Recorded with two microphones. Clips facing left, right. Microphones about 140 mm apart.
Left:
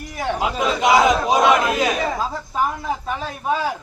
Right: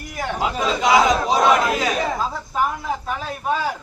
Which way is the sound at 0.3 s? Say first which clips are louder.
Even; 15° left (ahead or behind).